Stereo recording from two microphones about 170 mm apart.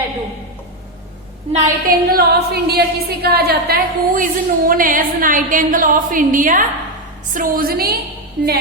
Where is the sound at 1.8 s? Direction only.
65° right (ahead or behind).